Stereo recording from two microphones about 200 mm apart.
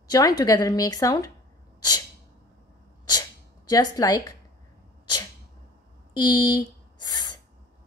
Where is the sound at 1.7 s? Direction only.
20° left (ahead or behind).